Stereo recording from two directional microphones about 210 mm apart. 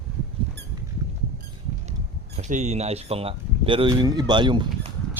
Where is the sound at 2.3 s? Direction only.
35° right (ahead or behind).